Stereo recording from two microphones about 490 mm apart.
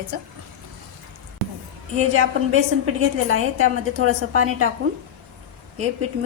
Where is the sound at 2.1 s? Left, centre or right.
Right.